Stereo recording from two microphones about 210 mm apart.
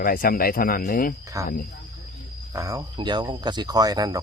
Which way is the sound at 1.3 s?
15° right (ahead or behind).